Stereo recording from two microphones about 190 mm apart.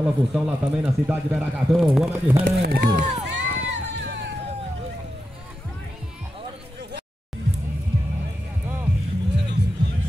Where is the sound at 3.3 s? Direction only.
65° right (ahead or behind).